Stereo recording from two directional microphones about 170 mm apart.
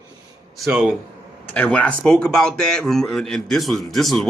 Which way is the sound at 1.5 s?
10° left (ahead or behind).